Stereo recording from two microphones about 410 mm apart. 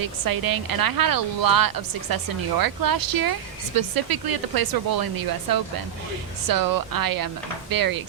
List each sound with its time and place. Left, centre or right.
0.0 s a woman's voice: right
6.5 s a woman's voice: right